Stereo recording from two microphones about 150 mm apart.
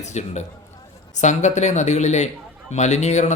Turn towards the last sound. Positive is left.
turn(degrees=50)  # may be behind; listen again after turning